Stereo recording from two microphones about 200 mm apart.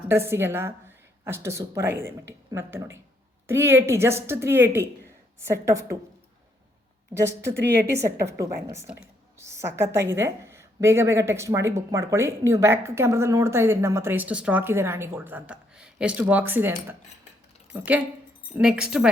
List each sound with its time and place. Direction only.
0.1 s a woman's voice: 10° right (ahead or behind)
7.1 s speech: 20° right (ahead or behind)
7.5 s a woman's voice: 60° right (ahead or behind)
7.9 s a woman's voice: 15° right (ahead or behind)
17.7 s a woman's voice: 10° right (ahead or behind)